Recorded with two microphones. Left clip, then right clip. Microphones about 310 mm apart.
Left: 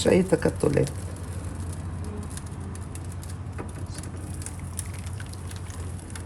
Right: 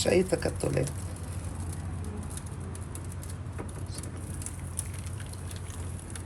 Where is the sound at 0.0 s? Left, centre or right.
Left.